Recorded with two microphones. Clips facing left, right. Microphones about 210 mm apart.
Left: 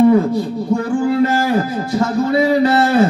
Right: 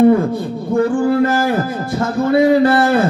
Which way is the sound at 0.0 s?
50° right (ahead or behind).